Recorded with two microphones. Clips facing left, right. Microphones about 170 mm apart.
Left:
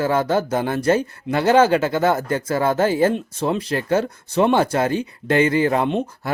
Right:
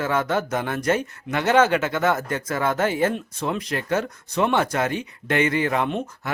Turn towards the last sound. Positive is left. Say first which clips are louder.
# left 4 dB
turn(degrees=30)  # may be behind; listen again after turning